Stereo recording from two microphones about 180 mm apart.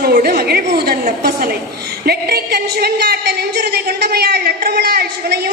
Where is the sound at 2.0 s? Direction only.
60° right (ahead or behind).